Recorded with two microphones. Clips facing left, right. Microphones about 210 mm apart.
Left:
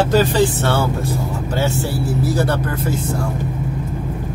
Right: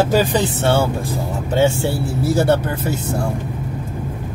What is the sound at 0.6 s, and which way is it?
Speech, 25° right (ahead or behind).